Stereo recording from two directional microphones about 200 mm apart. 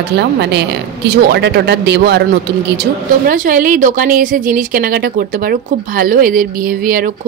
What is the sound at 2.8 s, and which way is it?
A woman's voice, 45° right (ahead or behind).